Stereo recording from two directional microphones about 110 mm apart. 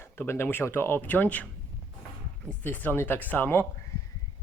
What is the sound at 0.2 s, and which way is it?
Speech, 20° left (ahead or behind).